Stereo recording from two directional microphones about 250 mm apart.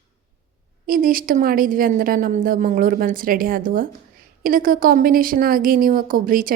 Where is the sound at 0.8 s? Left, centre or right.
Right.